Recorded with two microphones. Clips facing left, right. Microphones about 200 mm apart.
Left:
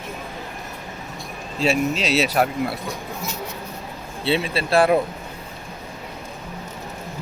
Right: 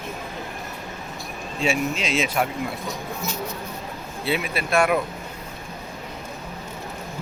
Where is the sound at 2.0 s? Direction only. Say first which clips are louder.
Left 4 dB; 40° left (ahead or behind).